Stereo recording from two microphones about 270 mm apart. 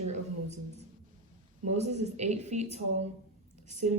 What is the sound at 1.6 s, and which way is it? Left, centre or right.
A woman's voice, right.